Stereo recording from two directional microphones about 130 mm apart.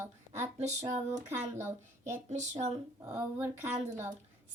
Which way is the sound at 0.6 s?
60° right (ahead or behind).